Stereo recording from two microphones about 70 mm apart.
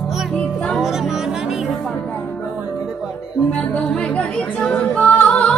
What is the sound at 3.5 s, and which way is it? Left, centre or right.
Music, centre.